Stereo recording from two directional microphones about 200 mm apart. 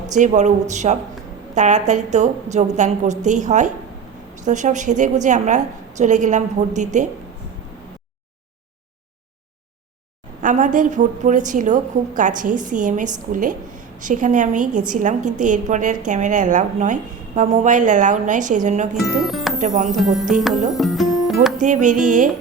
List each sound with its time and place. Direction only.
0.1 s a woman's voice: 35° right (ahead or behind)
10.4 s a woman's voice: 40° right (ahead or behind)
18.9 s speech: centre (ahead or behind)
19.5 s a woman's voice: 40° right (ahead or behind)
19.9 s speech: centre (ahead or behind)
21.6 s a woman's voice: 40° right (ahead or behind)